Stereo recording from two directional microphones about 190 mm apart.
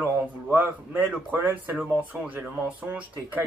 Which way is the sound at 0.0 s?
10° right (ahead or behind).